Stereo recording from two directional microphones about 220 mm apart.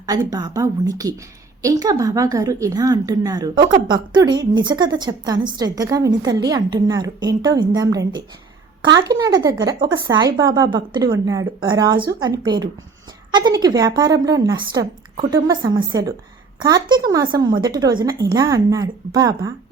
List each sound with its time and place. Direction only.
0.0 s a woman's voice: 15° right (ahead or behind)